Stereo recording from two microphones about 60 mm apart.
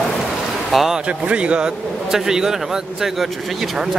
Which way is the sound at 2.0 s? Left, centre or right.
Centre.